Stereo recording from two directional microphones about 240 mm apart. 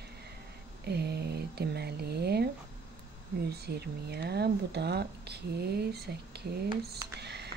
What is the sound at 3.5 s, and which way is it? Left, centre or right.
Speech, right.